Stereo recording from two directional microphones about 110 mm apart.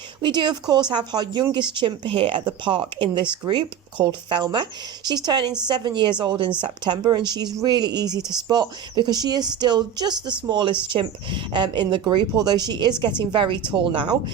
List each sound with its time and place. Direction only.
0.2 s speech: 45° right (ahead or behind)